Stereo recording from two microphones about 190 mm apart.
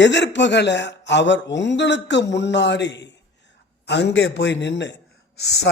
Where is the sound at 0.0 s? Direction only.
70° left (ahead or behind).